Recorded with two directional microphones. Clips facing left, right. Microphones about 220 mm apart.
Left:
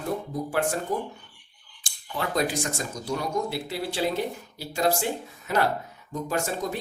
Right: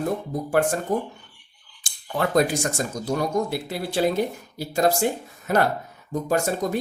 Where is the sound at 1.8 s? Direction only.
50° right (ahead or behind).